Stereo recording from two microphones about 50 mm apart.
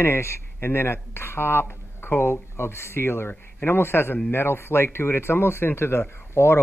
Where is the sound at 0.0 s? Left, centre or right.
Left.